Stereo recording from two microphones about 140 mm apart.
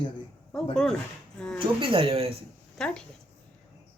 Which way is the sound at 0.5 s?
5° left (ahead or behind).